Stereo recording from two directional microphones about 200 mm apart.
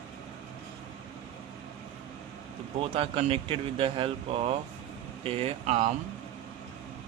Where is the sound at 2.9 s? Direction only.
30° right (ahead or behind).